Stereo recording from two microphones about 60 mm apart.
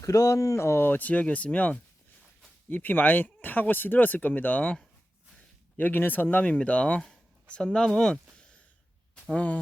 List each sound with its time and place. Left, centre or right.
0.0 s speech: left
2.6 s speech: left; by 8.2 s centre
8.4 s a sound: left
9.3 s speech: left